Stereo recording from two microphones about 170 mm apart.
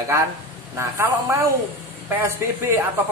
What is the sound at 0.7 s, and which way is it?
Speech, 15° right (ahead or behind).